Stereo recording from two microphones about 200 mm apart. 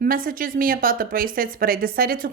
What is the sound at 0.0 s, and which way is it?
A woman's voice, 45° right (ahead or behind).